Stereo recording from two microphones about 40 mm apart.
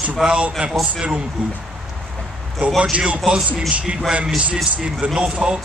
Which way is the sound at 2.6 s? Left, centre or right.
Right.